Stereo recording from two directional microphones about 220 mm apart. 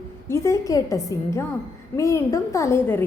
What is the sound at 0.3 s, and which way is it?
A woman's voice, 10° left (ahead or behind).